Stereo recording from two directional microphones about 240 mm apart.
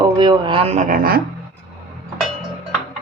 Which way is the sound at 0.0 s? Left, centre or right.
Centre.